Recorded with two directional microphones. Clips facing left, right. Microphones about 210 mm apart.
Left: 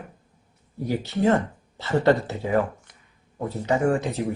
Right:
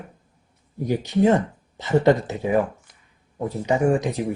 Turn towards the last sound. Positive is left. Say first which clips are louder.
# right 2 dB
turn(degrees=-15)  # may be behind; listen again after turning